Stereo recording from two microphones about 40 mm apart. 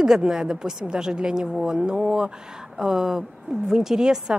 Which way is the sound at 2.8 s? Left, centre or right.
Centre.